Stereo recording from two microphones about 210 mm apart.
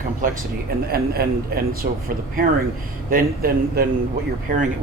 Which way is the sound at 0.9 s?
45° right (ahead or behind).